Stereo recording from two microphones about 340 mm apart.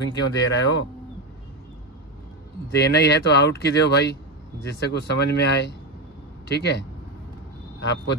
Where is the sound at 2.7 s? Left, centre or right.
Left.